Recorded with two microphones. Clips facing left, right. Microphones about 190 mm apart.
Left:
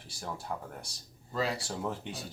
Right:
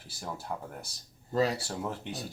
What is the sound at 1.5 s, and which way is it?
Speech, centre (ahead or behind).